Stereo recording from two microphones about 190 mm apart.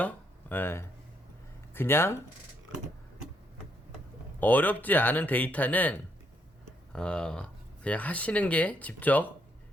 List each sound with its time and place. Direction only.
0.0 s speech: 10° left (ahead or behind)
4.4 s speech: 10° left (ahead or behind)